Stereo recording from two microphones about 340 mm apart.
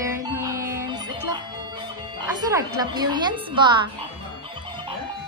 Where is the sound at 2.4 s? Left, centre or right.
Centre.